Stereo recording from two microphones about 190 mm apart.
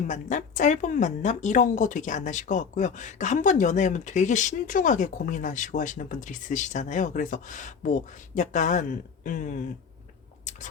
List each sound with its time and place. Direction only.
0.1 s a woman's voice: 40° left (ahead or behind)